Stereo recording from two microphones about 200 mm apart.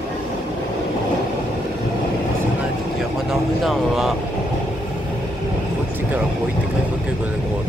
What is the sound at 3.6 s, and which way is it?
Vehicle, centre (ahead or behind).